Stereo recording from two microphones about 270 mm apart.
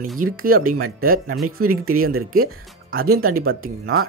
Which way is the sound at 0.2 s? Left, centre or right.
Right.